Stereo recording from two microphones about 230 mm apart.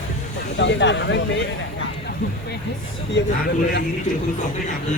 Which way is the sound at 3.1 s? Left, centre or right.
Left.